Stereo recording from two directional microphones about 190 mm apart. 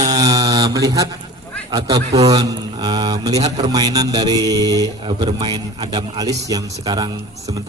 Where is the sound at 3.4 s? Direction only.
35° right (ahead or behind).